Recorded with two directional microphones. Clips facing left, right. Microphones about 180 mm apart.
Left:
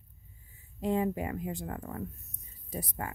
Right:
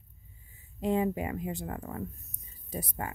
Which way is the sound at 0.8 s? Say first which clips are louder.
Right 1 dB; 20° right (ahead or behind).